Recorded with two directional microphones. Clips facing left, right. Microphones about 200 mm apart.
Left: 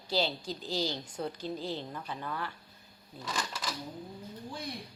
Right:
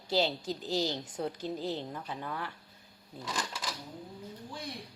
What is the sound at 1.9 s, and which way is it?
A woman's voice, 5° right (ahead or behind).